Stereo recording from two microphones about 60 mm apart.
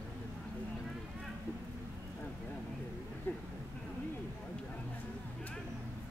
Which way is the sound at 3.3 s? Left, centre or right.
Left.